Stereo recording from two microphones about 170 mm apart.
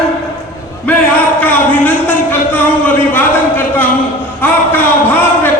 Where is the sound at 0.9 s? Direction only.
10° left (ahead or behind).